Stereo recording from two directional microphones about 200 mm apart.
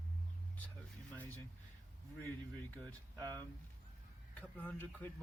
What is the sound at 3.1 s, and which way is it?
Speech, 15° right (ahead or behind).